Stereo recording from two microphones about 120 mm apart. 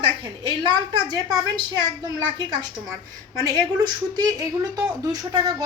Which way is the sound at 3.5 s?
30° right (ahead or behind).